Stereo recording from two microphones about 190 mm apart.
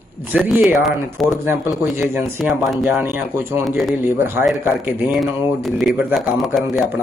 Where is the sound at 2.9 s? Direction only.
10° right (ahead or behind).